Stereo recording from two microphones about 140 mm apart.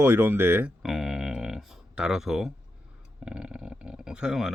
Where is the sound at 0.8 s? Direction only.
Centre (ahead or behind).